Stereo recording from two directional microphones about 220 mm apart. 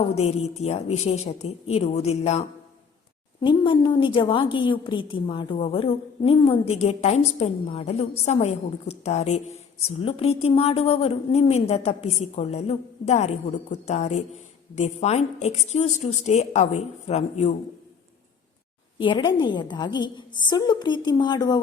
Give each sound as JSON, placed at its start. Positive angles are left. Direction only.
{"t": 0.2, "sound": "a woman's voice", "side_deg": 30}
{"t": 18.9, "sound": "a woman's voice", "side_deg": 20}